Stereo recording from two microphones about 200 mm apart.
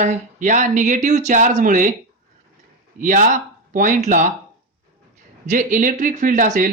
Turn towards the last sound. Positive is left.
turn(degrees=-40)  # may be behind; listen again after turning